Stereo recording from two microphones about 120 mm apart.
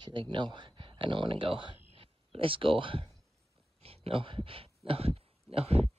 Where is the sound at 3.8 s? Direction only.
55° right (ahead or behind).